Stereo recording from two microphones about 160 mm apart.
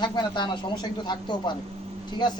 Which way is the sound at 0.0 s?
30° left (ahead or behind).